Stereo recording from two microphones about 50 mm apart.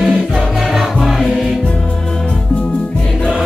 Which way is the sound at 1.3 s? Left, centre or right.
Centre.